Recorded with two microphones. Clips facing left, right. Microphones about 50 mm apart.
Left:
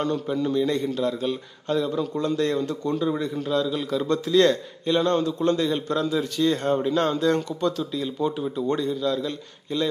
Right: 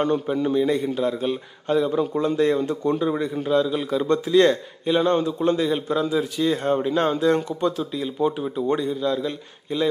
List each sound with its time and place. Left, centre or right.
0.0 s a man's voice: right